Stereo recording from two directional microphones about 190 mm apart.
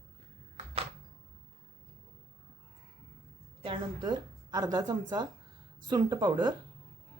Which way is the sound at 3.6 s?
25° right (ahead or behind).